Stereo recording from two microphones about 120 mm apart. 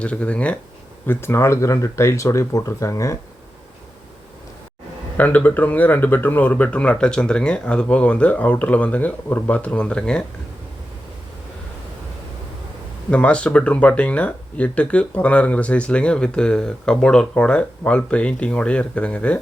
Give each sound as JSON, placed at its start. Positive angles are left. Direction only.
{"t": 0.0, "sound": "speech", "side_deg": 10}
{"t": 5.1, "sound": "speech", "side_deg": 15}
{"t": 13.1, "sound": "speech", "side_deg": 10}